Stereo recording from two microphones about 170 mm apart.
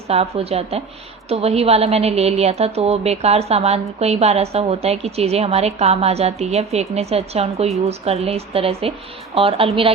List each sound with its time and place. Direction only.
0.1 s a woman's voice: 35° right (ahead or behind)